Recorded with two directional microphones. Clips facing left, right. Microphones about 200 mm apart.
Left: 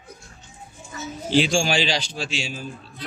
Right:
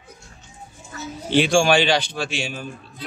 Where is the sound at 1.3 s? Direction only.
60° right (ahead or behind).